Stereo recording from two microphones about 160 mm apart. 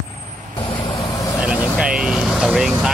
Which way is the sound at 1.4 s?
5° right (ahead or behind).